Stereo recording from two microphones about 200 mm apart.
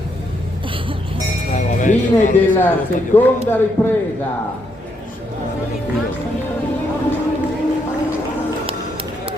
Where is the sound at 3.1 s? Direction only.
10° left (ahead or behind).